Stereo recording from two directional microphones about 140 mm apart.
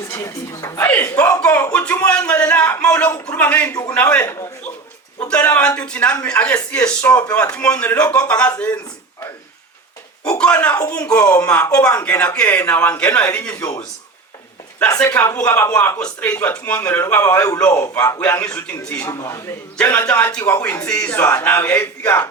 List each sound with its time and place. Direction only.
0.1 s a man's voice: 20° left (ahead or behind)
3.7 s speech: 25° left (ahead or behind)
3.9 s a man's voice: 10° left (ahead or behind)
5.5 s a man's voice: 10° left (ahead or behind)
10.3 s a man's voice: 10° left (ahead or behind)
14.9 s a man's voice: 10° left (ahead or behind)
18.2 s a man's voice: 10° left (ahead or behind)